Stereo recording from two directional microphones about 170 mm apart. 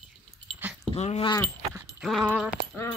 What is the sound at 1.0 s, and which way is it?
Speech, 40° left (ahead or behind).